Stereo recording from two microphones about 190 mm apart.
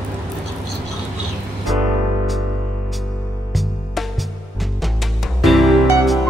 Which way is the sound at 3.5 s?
Centre (ahead or behind).